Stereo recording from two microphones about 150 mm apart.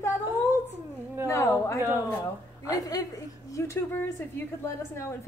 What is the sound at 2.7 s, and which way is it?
A woman's voice, 25° left (ahead or behind).